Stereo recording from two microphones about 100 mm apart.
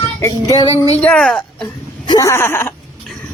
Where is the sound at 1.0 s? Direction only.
5° left (ahead or behind).